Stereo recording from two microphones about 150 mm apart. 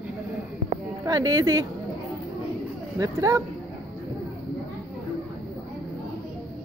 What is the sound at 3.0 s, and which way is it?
Speech, 20° right (ahead or behind).